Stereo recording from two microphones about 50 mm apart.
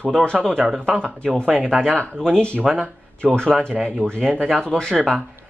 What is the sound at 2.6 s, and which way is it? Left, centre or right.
Speech, centre.